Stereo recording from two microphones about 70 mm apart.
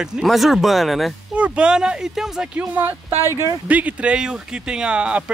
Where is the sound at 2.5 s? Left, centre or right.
Right.